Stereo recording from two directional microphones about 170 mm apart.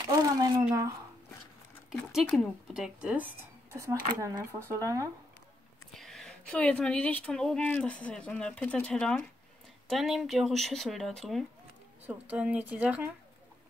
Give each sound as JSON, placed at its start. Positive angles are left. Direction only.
{"t": 0.0, "sound": "a sound", "side_deg": -20}
{"t": 1.9, "sound": "speech", "side_deg": 0}
{"t": 5.9, "sound": "speech", "side_deg": 0}